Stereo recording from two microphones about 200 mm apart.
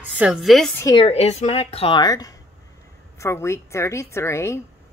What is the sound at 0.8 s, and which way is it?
Speech, 15° left (ahead or behind).